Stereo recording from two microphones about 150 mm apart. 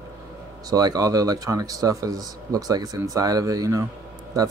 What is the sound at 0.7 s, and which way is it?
A man's voice, 25° right (ahead or behind).